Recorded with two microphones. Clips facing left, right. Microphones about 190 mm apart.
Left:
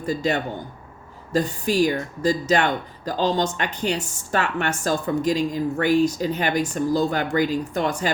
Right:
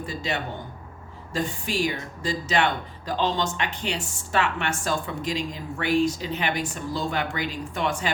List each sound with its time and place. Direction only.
0.0 s speech: 45° left (ahead or behind)